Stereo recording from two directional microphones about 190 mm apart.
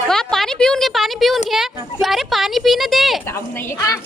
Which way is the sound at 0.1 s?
Centre (ahead or behind).